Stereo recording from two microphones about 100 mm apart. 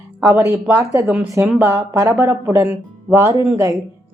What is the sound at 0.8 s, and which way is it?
Speech, 30° right (ahead or behind).